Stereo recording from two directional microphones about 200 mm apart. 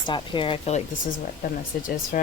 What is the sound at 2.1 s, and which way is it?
Speech, 40° left (ahead or behind).